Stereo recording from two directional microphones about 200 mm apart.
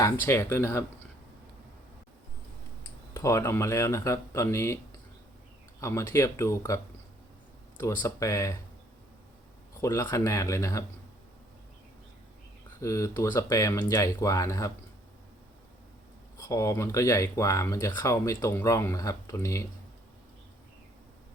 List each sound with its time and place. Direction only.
0.0 s speech: 10° left (ahead or behind)
3.1 s speech: 15° left (ahead or behind)
5.8 s speech: 15° left (ahead or behind)
7.8 s speech: 15° left (ahead or behind)
9.8 s speech: 15° left (ahead or behind)
12.8 s speech: 15° left (ahead or behind)
16.4 s speech: 15° left (ahead or behind)